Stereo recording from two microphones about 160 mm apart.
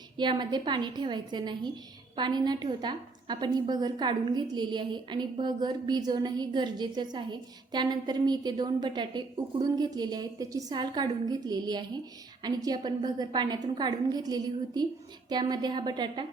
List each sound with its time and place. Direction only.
0.2 s a woman's voice: 30° right (ahead or behind)